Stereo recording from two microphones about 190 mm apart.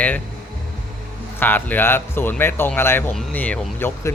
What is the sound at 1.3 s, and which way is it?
Speech, 10° left (ahead or behind).